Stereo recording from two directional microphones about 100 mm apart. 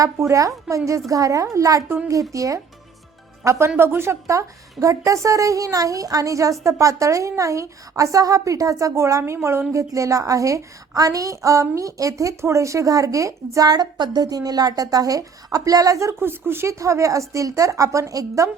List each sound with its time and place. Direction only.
0.0 s a woman's voice: 30° right (ahead or behind)